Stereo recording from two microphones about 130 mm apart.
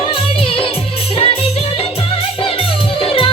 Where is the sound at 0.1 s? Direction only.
45° left (ahead or behind).